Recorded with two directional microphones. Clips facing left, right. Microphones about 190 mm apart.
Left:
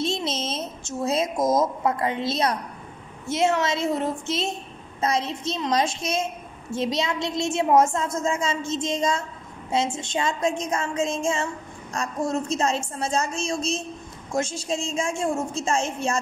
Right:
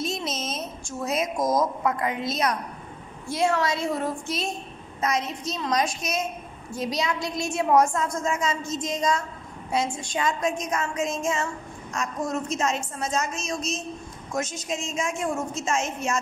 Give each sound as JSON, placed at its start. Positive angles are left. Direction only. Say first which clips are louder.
{"t": 0.0, "sound": "a woman's voice", "louder": "left 3 dB", "side_deg": 30}